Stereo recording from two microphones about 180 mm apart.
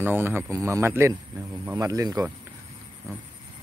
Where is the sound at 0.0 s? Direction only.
10° right (ahead or behind).